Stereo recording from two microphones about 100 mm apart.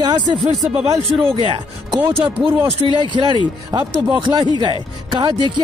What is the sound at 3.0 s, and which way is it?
Speech, 50° right (ahead or behind).